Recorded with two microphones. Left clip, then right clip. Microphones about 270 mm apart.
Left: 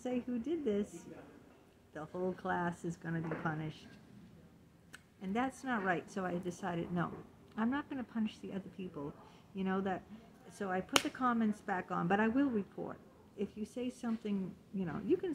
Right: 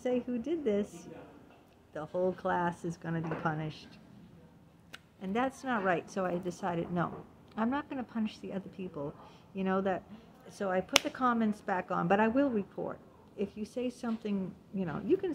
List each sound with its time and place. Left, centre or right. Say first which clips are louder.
0.3 s speech: right 4 dB; centre
2.0 s a woman's voice: right 7 dB; centre
5.2 s a woman's voice: right 5 dB; centre